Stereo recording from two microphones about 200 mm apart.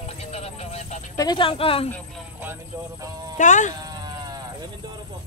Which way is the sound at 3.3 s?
40° left (ahead or behind).